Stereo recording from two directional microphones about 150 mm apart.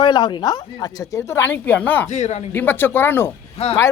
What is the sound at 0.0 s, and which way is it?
Speech, 30° left (ahead or behind).